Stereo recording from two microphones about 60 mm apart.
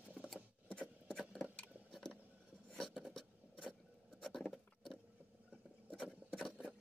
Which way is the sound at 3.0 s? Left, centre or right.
Centre.